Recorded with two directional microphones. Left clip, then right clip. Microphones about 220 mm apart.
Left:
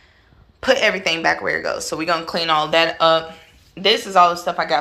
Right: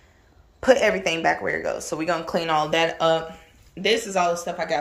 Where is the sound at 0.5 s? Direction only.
20° right (ahead or behind).